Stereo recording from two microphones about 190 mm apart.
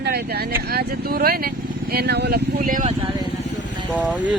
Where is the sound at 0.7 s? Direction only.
55° right (ahead or behind).